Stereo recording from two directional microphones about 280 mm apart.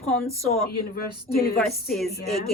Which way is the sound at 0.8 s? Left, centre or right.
Left.